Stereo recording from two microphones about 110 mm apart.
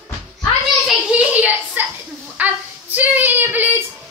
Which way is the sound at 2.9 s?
15° right (ahead or behind).